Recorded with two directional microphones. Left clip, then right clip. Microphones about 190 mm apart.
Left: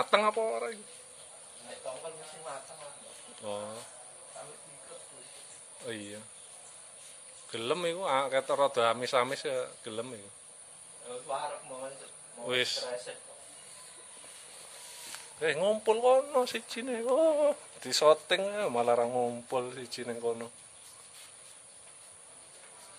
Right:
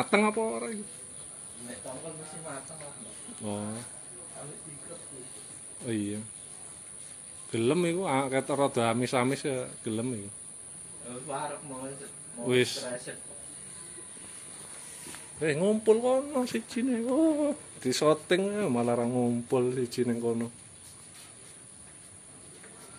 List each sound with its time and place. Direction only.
0.0 s speech: centre (ahead or behind)
3.4 s speech: centre (ahead or behind)
5.9 s speech: centre (ahead or behind)
7.5 s speech: centre (ahead or behind)
12.4 s speech: centre (ahead or behind)
14.9 s a sound: 20° left (ahead or behind)
15.4 s speech: 10° left (ahead or behind); by 20.5 s 5° right (ahead or behind)